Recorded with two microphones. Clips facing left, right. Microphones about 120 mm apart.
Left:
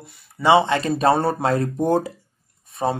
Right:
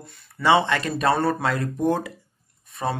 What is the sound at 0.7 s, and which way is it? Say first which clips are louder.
Speech: left 4 dB; 30° left (ahead or behind).